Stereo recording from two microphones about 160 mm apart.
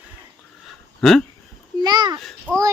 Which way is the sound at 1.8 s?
25° right (ahead or behind).